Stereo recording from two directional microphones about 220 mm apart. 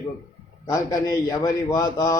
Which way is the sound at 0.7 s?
15° left (ahead or behind).